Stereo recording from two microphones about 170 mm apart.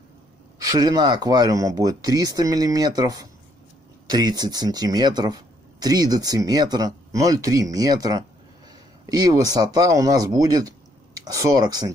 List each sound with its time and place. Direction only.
0.6 s speech: 20° right (ahead or behind)